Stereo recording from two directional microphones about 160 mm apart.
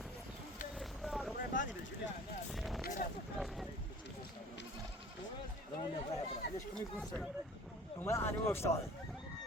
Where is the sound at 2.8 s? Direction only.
55° left (ahead or behind).